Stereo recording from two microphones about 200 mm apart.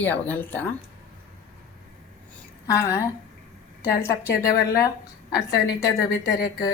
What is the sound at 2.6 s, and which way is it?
Speech, 15° left (ahead or behind).